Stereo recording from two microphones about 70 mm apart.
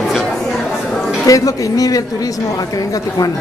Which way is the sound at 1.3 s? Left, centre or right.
Left.